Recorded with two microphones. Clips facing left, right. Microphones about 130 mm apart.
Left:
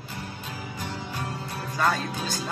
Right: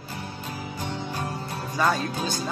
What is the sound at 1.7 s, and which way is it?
Speech, centre (ahead or behind).